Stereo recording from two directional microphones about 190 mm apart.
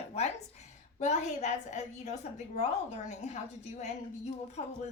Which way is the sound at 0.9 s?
35° left (ahead or behind).